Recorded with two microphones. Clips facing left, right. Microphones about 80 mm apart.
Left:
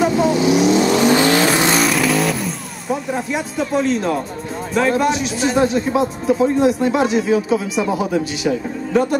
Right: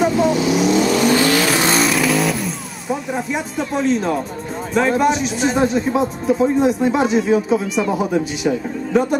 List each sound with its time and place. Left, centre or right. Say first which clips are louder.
0.0 s vehicle: left 1 dB; centre
0.8 s vehicle: left 1 dB; left
1.6 s vehicle: even; centre
4.7 s speech: right 1 dB; centre